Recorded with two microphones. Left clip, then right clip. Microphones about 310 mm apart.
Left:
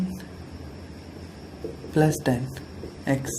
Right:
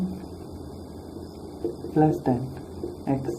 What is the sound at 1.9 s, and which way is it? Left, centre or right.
Speech, left.